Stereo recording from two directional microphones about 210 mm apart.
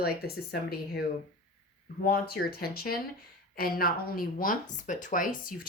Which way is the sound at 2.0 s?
45° left (ahead or behind).